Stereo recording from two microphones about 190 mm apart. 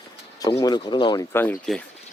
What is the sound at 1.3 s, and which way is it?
Speech, 10° left (ahead or behind).